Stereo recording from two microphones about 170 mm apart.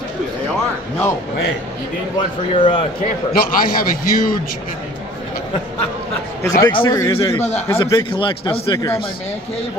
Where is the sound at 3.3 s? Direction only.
55° left (ahead or behind).